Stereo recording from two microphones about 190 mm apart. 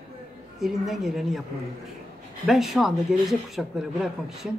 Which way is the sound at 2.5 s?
Centre (ahead or behind).